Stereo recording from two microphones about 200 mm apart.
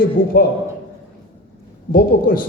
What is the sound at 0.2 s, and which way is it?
Speech, 45° left (ahead or behind).